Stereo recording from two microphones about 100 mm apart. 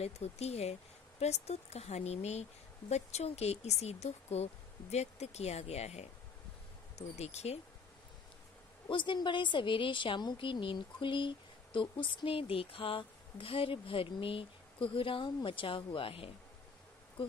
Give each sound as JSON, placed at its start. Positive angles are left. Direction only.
{"t": 0.0, "sound": "speech", "side_deg": 90}
{"t": 8.8, "sound": "a woman's voice", "side_deg": 55}